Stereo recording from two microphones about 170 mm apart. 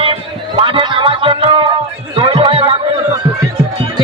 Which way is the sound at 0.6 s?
30° right (ahead or behind).